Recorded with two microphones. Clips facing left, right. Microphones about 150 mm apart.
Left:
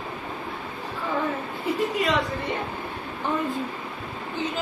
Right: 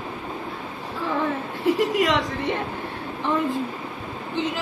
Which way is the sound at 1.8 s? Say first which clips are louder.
Left 1 dB; 90° right.